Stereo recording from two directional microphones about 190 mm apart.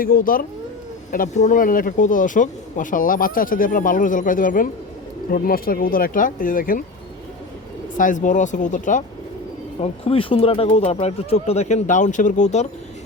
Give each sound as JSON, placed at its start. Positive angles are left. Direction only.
{"t": 0.0, "sound": "speech", "side_deg": 50}
{"t": 7.9, "sound": "speech", "side_deg": 45}
{"t": 9.8, "sound": "speech", "side_deg": 30}